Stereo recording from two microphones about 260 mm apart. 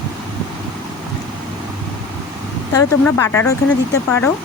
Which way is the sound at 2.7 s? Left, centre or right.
Centre.